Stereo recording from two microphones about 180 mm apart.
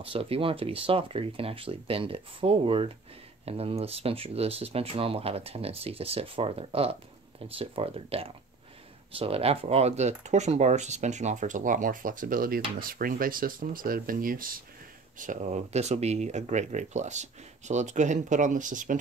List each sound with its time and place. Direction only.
0.0 s speech: 30° right (ahead or behind)